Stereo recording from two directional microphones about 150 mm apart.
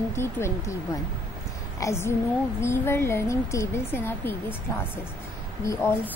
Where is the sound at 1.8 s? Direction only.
20° left (ahead or behind).